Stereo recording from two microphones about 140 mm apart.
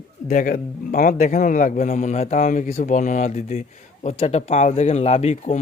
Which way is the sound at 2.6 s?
55° left (ahead or behind).